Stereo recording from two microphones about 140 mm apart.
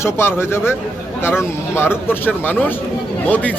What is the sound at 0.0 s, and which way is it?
Speech, 15° left (ahead or behind).